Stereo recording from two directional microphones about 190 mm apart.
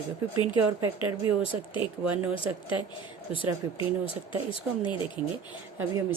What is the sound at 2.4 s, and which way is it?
Speech, 25° left (ahead or behind).